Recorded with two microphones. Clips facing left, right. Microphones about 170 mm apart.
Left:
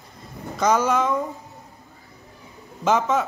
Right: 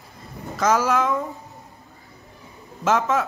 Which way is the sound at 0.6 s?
Centre (ahead or behind).